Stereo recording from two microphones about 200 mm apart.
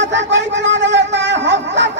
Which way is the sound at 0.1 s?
65° right (ahead or behind).